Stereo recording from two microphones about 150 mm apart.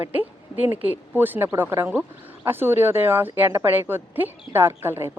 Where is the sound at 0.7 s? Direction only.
15° right (ahead or behind).